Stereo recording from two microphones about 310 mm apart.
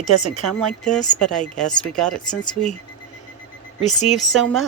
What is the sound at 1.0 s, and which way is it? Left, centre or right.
Speech, centre.